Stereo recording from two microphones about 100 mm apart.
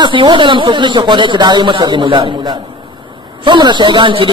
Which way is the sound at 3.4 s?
50° right (ahead or behind).